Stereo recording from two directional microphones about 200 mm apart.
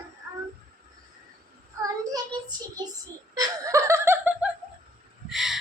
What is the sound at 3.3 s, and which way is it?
Laughter, 15° right (ahead or behind).